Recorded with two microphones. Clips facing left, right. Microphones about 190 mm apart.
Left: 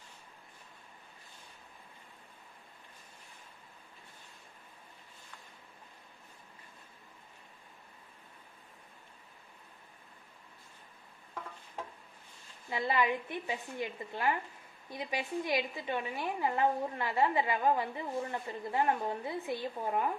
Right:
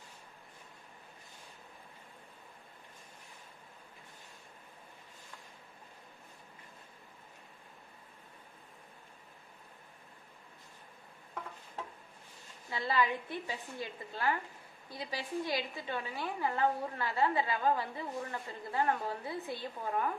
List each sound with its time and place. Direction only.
12.7 s a woman's voice: 20° left (ahead or behind)